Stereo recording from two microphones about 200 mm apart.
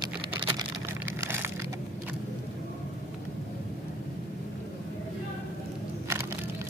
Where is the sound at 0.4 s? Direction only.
25° right (ahead or behind).